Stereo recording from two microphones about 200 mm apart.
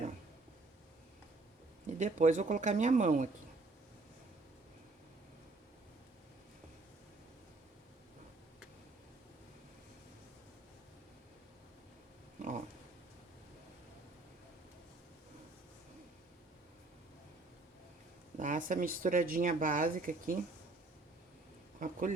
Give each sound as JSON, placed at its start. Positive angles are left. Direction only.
{"t": 2.0, "sound": "speech", "side_deg": -40}
{"t": 12.4, "sound": "a sound", "side_deg": -40}
{"t": 18.3, "sound": "speech", "side_deg": -40}
{"t": 21.8, "sound": "speech", "side_deg": -40}